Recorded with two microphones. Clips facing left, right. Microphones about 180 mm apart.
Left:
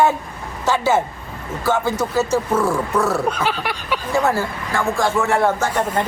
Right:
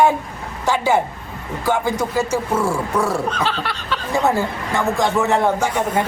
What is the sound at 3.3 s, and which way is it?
Speech, 10° left (ahead or behind).